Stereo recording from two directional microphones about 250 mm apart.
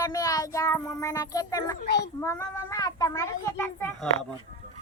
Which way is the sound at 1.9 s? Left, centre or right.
Left.